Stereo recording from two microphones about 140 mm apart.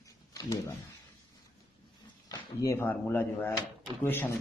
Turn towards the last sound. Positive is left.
turn(degrees=15)  # may be behind; listen again after turning